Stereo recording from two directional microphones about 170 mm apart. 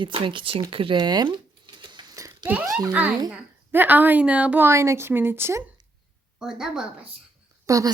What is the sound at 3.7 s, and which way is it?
A woman's voice, 10° right (ahead or behind).